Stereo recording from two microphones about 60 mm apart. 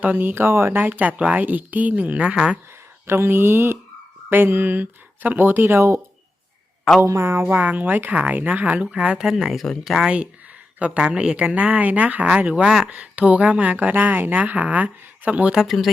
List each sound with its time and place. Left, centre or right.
0.0 s speech: right
0.8 s speech: right; by 2.6 s centre
3.1 s speech: right
7.0 s speech: right
7.4 s speech: right; by 10.1 s centre
10.8 s speech: centre
12.6 s speech: centre
12.9 s speech: right
15.5 s speech: centre